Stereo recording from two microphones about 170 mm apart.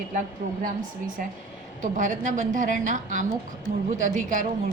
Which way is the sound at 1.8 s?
50° right (ahead or behind).